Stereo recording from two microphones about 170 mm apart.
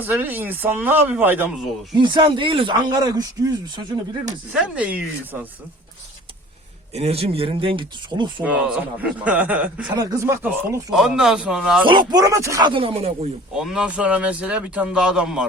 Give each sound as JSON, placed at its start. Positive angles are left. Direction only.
{"t": 0.0, "sound": "speech", "side_deg": -10}
{"t": 2.0, "sound": "speech", "side_deg": -30}
{"t": 4.5, "sound": "speech", "side_deg": -5}
{"t": 6.9, "sound": "speech", "side_deg": -35}
{"t": 8.4, "sound": "speech", "side_deg": -5}
{"t": 9.9, "sound": "speech", "side_deg": -20}
{"t": 10.9, "sound": "a man's voice", "side_deg": 0}
{"t": 11.9, "sound": "speech", "side_deg": -25}
{"t": 13.6, "sound": "speech", "side_deg": -5}